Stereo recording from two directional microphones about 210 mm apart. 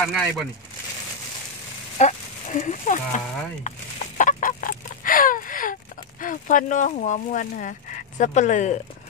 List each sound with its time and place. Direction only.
0.0 s speech: centre (ahead or behind)
2.0 s speech: 35° left (ahead or behind)
3.6 s chicken: 35° left (ahead or behind)
6.2 s speech: 40° left (ahead or behind)